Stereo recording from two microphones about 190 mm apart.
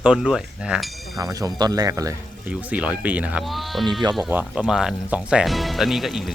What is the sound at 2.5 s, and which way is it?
Speech, 5° right (ahead or behind).